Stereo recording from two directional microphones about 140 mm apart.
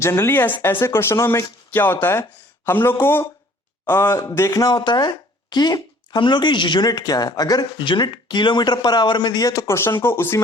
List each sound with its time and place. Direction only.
0.0 s speech: 20° left (ahead or behind)
4.7 s speech: 35° left (ahead or behind); by 10.4 s 20° left (ahead or behind)